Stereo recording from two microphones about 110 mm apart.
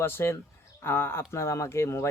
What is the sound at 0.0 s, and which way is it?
A man's voice, 20° left (ahead or behind).